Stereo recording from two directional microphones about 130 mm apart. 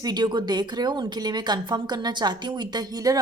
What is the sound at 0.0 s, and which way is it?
A woman's voice, 35° right (ahead or behind).